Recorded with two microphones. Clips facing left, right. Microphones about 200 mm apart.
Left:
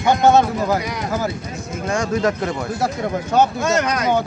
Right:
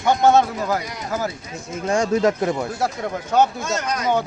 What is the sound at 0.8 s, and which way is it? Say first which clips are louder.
Speech: left 6 dB; 75° left (ahead or behind).